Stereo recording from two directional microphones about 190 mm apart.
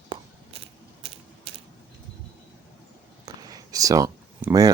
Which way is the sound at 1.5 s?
30° right (ahead or behind).